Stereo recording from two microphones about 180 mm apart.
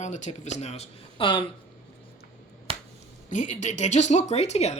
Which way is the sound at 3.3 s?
45° left (ahead or behind).